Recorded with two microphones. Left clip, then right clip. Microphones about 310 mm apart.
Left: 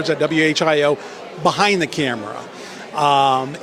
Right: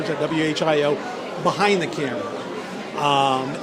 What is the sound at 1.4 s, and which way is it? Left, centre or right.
Speech, left.